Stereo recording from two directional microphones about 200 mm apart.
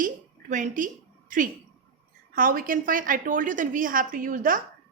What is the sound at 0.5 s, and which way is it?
Speech, 40° right (ahead or behind).